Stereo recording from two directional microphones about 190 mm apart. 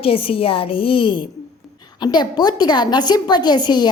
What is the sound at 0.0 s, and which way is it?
A woman's voice, 30° left (ahead or behind).